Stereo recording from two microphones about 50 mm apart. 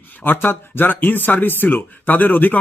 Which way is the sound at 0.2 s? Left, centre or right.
Left.